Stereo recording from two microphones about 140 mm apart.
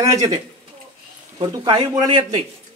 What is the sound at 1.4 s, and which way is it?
A man's voice, 30° right (ahead or behind).